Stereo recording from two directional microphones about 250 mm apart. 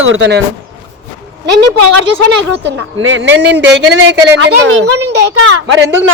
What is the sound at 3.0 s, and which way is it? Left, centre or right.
A woman's voice, right.